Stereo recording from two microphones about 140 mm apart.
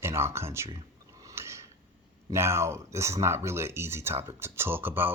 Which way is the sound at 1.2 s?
20° right (ahead or behind).